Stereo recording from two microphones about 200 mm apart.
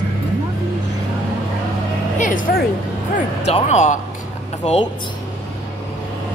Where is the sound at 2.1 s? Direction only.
40° left (ahead or behind).